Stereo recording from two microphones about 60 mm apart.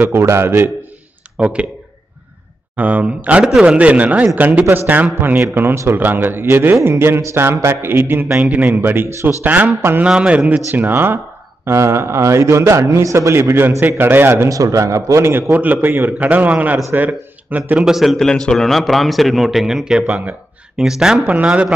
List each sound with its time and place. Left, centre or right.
0.0 s a man's voice: right
1.4 s a man's voice: centre
2.7 s a man's voice: right
8.4 s a man's voice: right
10.0 s a man's voice: centre
10.7 s a man's voice: right
11.6 s a man's voice: right
14.3 s a man's voice: right
15.5 s a man's voice: right
17.7 s speech: centre
18.1 s a man's voice: centre
20.1 s a man's voice: right
20.7 s speech: centre
21.3 s a man's voice: right